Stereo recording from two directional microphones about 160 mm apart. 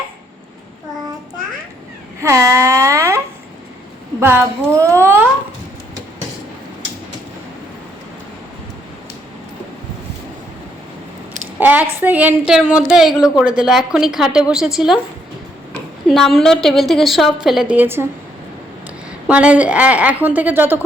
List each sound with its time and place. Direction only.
2.2 s a sound: 20° right (ahead or behind)
4.2 s a woman's voice: 15° right (ahead or behind)
11.6 s a woman's voice: 10° right (ahead or behind)
16.0 s a woman's voice: centre (ahead or behind)
19.3 s a woman's voice: 10° right (ahead or behind)